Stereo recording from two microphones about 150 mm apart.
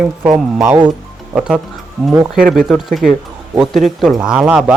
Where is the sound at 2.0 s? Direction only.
Centre (ahead or behind).